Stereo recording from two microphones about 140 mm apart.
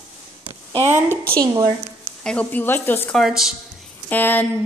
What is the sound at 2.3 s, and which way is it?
Speech, 10° left (ahead or behind).